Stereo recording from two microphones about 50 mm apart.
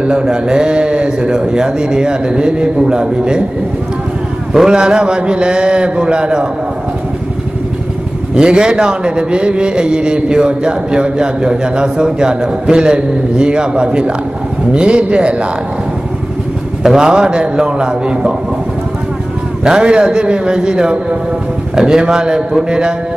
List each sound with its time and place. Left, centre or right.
0.0 s a man's voice: centre
4.6 s a man's voice: centre
8.4 s a man's voice: centre
16.8 s a man's voice: centre
19.6 s a man's voice: centre